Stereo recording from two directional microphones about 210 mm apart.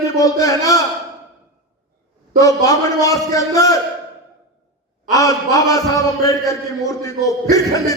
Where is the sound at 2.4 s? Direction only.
15° left (ahead or behind).